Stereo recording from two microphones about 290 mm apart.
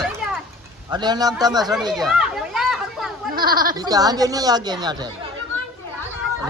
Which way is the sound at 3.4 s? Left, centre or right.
Right.